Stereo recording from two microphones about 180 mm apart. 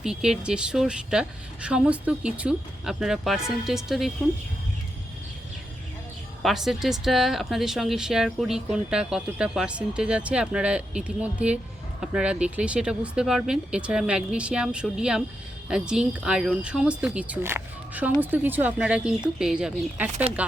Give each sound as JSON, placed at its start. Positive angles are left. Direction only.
{"t": 0.0, "sound": "speech", "side_deg": -5}
{"t": 6.4, "sound": "speech", "side_deg": 0}